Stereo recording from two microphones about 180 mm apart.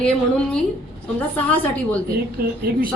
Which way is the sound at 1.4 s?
10° left (ahead or behind).